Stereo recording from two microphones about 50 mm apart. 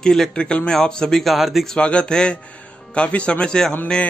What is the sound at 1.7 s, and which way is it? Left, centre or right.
A man's voice, left.